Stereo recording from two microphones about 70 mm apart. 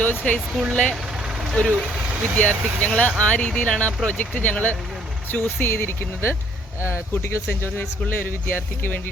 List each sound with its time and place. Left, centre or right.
0.0 s speech: left
1.6 s speech: centre
2.4 s speech: left